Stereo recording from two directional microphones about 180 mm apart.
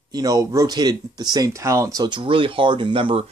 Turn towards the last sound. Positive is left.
turn(degrees=-30)  # may be behind; listen again after turning